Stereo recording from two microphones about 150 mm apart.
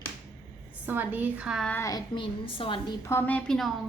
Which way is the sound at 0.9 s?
10° right (ahead or behind).